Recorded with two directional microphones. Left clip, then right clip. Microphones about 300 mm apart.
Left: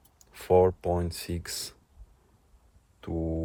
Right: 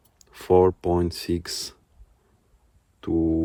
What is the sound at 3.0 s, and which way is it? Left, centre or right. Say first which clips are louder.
Speech: right 10 dB; right.